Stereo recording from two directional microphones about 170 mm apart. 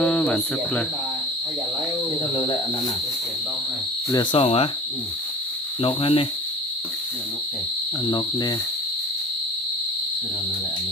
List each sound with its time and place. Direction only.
0.0 s speech: 5° left (ahead or behind)
4.1 s speech: 30° left (ahead or behind)
5.8 s speech: 30° left (ahead or behind)
8.0 s cricket: 25° left (ahead or behind)